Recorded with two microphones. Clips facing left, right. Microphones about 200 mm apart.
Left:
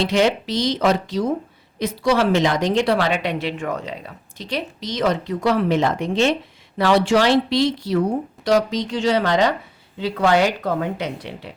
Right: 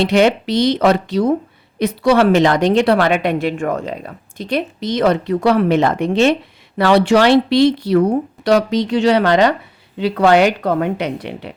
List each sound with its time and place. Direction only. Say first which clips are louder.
0.0 s a woman's voice: right 5 dB; 60° right (ahead or behind)